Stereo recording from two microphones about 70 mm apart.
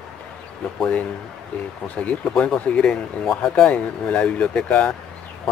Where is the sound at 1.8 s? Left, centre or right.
Left.